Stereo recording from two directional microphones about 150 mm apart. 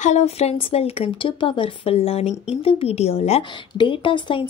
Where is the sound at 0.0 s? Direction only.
50° left (ahead or behind).